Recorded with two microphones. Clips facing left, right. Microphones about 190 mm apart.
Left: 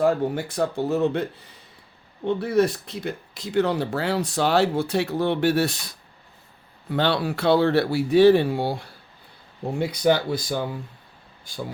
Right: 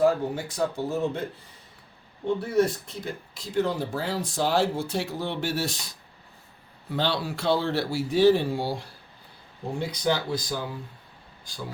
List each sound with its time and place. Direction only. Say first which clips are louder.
0.0 s speech: left 2 dB; 60° left (ahead or behind)
2.2 s speech: left 3 dB; 70° left (ahead or behind)
6.9 s speech: left 5 dB; 60° left (ahead or behind)
9.9 s speech: left 6 dB; 60° left (ahead or behind)